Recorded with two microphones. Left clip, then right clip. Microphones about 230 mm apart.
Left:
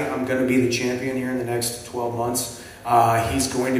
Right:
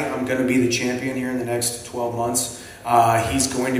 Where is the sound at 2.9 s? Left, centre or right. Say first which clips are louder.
Right 1 dB; right.